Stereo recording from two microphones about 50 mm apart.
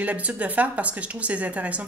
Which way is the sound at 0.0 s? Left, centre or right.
Right.